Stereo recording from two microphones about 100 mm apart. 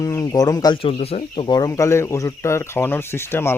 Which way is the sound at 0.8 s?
80° left.